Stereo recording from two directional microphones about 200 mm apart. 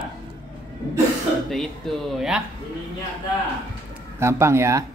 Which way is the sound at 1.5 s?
Centre (ahead or behind).